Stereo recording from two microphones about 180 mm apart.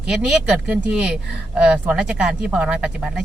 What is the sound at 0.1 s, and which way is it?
Speech, 5° right (ahead or behind).